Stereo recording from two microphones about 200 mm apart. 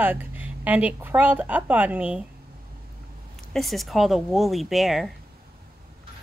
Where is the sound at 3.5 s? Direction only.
Centre (ahead or behind).